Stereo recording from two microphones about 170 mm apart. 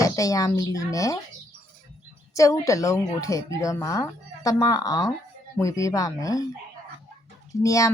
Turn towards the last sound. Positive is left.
turn(degrees=20)  # may be behind; listen again after turning